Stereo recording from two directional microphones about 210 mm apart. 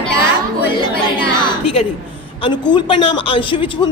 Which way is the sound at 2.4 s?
20° left (ahead or behind).